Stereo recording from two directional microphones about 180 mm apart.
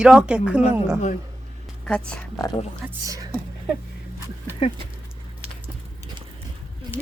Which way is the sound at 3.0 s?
20° right (ahead or behind).